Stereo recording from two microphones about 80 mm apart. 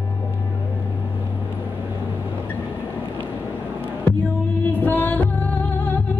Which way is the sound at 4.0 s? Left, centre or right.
Left.